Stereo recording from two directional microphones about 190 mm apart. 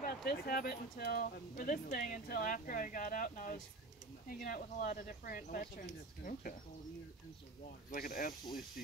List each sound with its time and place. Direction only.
0.0 s speech: 50° left (ahead or behind)
7.9 s speech: 50° left (ahead or behind)